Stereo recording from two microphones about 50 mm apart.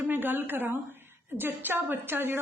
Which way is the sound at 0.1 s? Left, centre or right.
Right.